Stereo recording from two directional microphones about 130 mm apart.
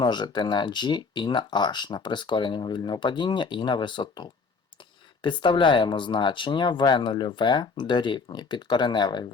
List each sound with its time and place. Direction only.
0.0 s speech: 35° left (ahead or behind)